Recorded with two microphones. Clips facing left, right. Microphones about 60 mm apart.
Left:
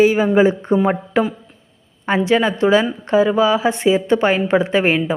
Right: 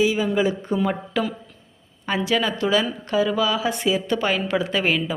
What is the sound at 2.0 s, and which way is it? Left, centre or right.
A woman's voice, left.